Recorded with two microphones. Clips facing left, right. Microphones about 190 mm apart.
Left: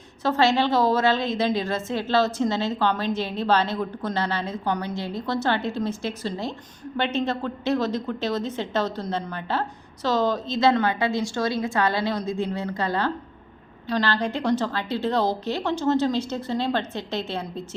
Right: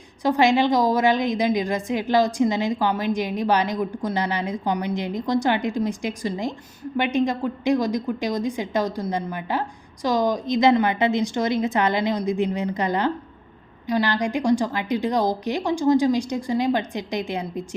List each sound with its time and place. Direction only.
0.2 s a woman's voice: 15° right (ahead or behind)